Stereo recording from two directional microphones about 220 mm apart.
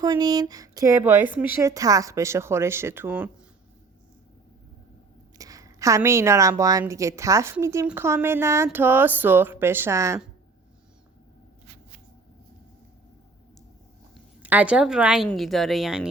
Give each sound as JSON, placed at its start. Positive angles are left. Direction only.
{"t": 0.0, "sound": "a woman's voice", "side_deg": -15}
{"t": 5.4, "sound": "a woman's voice", "side_deg": -15}
{"t": 14.4, "sound": "a woman's voice", "side_deg": -5}